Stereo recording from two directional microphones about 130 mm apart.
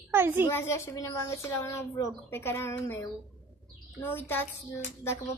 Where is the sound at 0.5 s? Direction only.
20° left (ahead or behind).